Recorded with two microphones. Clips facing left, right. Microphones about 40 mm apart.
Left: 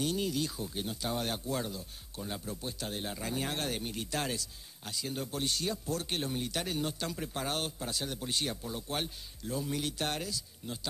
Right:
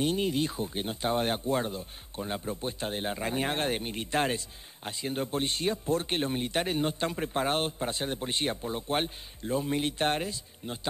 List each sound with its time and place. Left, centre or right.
0.0 s speech: right